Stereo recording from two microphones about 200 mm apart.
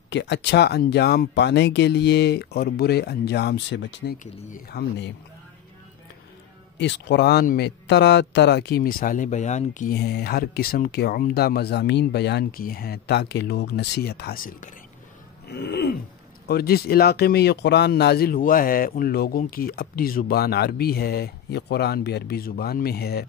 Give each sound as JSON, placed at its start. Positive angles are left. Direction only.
{"t": 0.1, "sound": "speech", "side_deg": 60}
{"t": 4.2, "sound": "speech", "side_deg": 45}
{"t": 6.8, "sound": "speech", "side_deg": 60}
{"t": 9.9, "sound": "speech", "side_deg": 55}
{"t": 15.5, "sound": "speech", "side_deg": 55}